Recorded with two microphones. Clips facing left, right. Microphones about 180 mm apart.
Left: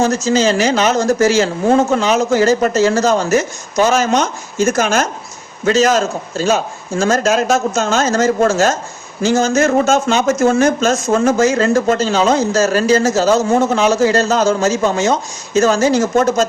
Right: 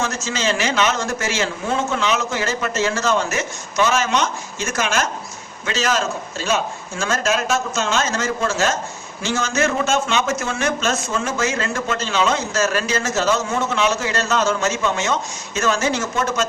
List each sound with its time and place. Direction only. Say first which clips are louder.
0.0 s speech: left 10 dB; 40° left (ahead or behind)